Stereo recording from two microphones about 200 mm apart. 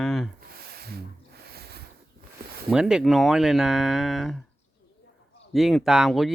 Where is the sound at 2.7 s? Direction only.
5° right (ahead or behind).